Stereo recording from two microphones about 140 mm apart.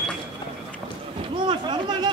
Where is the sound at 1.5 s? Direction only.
35° right (ahead or behind).